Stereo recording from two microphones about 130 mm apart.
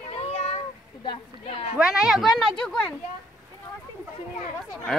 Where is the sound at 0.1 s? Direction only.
50° left (ahead or behind).